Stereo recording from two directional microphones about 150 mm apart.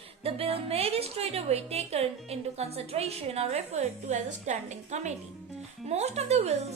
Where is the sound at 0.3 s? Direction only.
40° right (ahead or behind).